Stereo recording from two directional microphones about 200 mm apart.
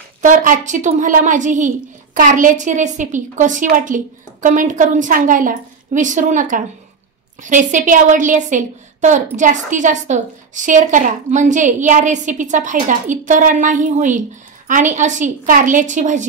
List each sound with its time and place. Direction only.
0.2 s a woman's voice: 40° right (ahead or behind)